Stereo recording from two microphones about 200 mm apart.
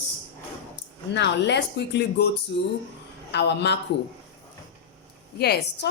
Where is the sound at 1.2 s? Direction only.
60° left (ahead or behind).